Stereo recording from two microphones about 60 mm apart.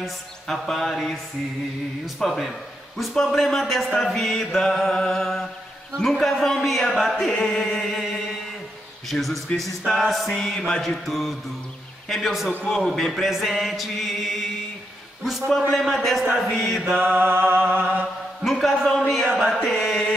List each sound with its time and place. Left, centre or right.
0.0 s music: centre
7.2 s chant: centre
7.8 s music: centre
15.7 s music: centre
16.9 s music: right
18.4 s music: centre
19.9 s mantra: centre